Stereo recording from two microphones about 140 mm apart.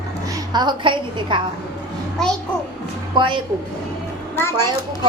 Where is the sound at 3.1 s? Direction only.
35° right (ahead or behind).